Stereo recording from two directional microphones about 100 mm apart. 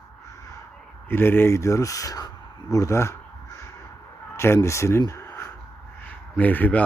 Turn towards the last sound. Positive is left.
turn(degrees=20)  # may be behind; listen again after turning